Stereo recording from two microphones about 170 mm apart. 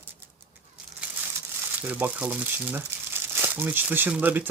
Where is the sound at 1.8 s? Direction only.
10° right (ahead or behind).